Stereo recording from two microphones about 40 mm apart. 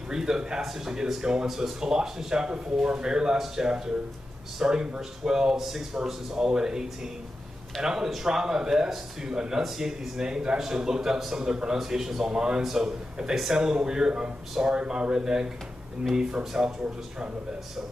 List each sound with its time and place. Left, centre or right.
0.1 s a man's voice: centre